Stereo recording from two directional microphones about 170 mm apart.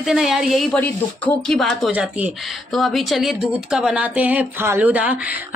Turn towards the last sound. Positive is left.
turn(degrees=-10)  # may be behind; listen again after turning